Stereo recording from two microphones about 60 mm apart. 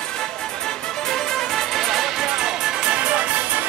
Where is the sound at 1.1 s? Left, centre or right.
Centre.